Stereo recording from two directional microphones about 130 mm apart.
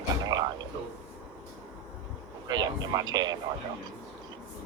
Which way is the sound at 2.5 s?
30° right (ahead or behind).